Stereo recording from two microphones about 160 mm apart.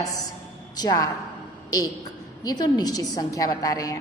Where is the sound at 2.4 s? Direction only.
25° left (ahead or behind).